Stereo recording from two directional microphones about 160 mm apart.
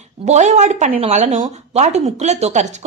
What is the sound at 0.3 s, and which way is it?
Speech, 45° right (ahead or behind).